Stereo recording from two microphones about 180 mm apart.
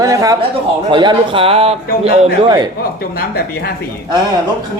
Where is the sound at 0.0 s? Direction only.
20° right (ahead or behind); by 2.1 s 35° right (ahead or behind).